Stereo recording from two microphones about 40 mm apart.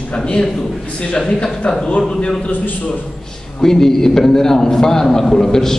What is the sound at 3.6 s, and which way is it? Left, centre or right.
A man's voice, centre.